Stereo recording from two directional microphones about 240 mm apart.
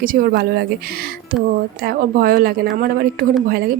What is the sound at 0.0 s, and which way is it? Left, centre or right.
Speech, right.